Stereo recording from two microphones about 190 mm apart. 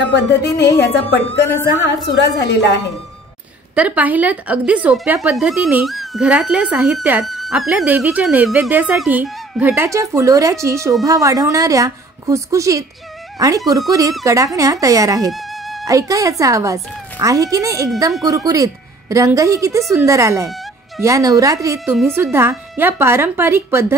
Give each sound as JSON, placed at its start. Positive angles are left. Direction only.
{"t": 0.1, "sound": "a woman's voice", "side_deg": 65}
{"t": 1.8, "sound": "a woman's voice", "side_deg": 65}
{"t": 3.7, "sound": "speech", "side_deg": -5}
{"t": 15.3, "sound": "music", "side_deg": 0}
{"t": 15.9, "sound": "speech", "side_deg": -15}